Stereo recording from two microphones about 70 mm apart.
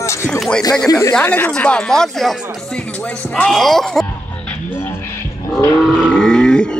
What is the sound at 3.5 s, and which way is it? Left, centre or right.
Speech, centre.